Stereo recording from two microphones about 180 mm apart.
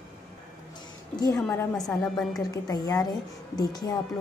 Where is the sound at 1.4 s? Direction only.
5° left (ahead or behind).